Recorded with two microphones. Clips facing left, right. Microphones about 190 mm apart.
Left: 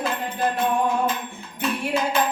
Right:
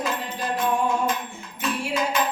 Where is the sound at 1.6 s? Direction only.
30° left (ahead or behind).